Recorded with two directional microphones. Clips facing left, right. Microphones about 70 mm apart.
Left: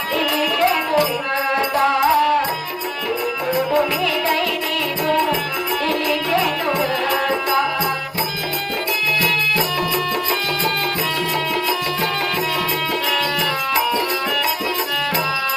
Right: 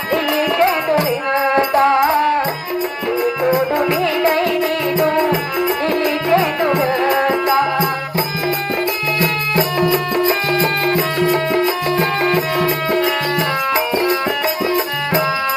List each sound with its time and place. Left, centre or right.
0.1 s music: right
3.5 s music: right
9.6 s music: right